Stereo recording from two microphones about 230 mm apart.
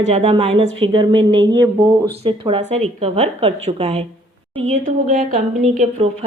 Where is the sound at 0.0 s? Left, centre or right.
Right.